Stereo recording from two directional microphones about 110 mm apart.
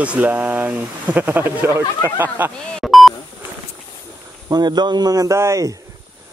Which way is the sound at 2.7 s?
Centre (ahead or behind).